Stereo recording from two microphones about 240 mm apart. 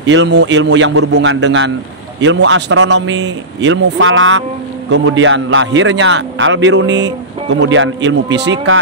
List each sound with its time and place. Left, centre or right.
0.0 s a man's voice: right